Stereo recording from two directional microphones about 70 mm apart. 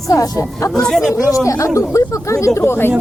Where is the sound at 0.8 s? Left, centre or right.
Centre.